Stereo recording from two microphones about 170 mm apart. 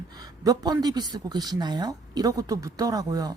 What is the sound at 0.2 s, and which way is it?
A woman's voice, 25° right (ahead or behind).